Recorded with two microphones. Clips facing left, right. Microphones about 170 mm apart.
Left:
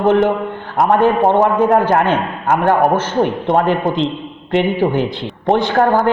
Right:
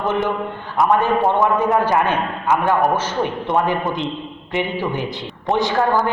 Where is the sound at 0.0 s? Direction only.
55° left (ahead or behind).